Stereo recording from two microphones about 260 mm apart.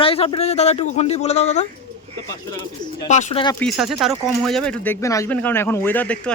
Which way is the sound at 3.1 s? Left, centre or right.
Left.